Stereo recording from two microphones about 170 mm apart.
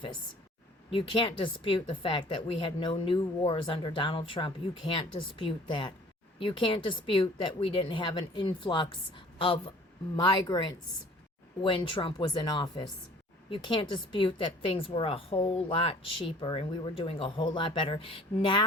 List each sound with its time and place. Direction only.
0.9 s a woman's voice: 30° left (ahead or behind)